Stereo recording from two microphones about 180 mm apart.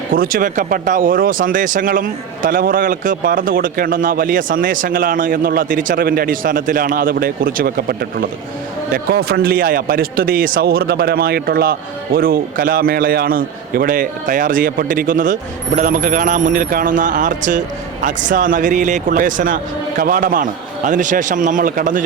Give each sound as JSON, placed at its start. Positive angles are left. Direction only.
{"t": 0.1, "sound": "a man's voice", "side_deg": -50}